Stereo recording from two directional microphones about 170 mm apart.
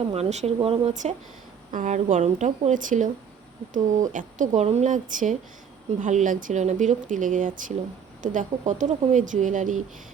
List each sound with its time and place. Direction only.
0.1 s speech: 40° right (ahead or behind)
1.7 s speech: 50° right (ahead or behind)